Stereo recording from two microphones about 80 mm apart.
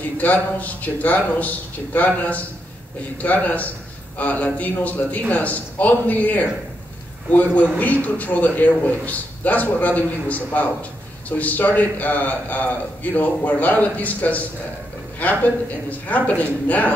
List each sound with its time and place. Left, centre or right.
0.2 s a man's voice: centre
7.8 s a man's voice: centre